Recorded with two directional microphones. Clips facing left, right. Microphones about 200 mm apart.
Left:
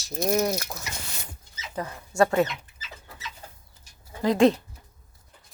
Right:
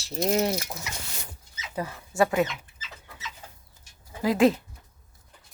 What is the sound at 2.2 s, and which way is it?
Speech, 5° right (ahead or behind).